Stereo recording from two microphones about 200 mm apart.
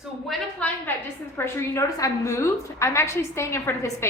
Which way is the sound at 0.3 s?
5° left (ahead or behind).